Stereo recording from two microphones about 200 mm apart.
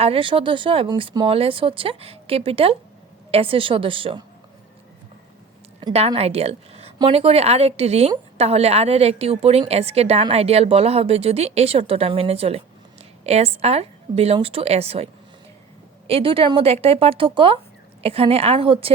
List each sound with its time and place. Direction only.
0.0 s speech: 25° right (ahead or behind)
5.8 s a woman's voice: 25° right (ahead or behind)